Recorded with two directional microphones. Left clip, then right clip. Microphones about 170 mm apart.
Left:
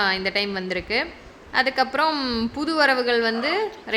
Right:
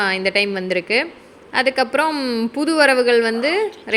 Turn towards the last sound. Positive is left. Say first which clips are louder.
# right 5 dB
turn(degrees=-15)  # may be behind; listen again after turning